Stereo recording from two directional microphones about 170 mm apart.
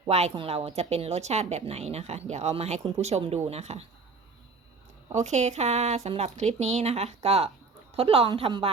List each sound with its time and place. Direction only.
0.1 s a woman's voice: 40° right (ahead or behind)
5.1 s a woman's voice: 45° right (ahead or behind)